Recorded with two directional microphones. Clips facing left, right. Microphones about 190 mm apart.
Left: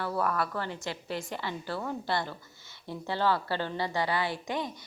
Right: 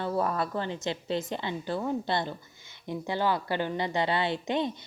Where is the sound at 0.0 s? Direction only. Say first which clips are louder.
Right 2 dB; 25° right (ahead or behind).